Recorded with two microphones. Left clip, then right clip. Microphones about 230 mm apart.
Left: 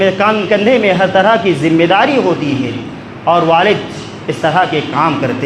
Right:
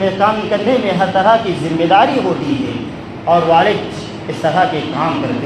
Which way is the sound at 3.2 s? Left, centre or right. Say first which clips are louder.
Left 1 dB; left.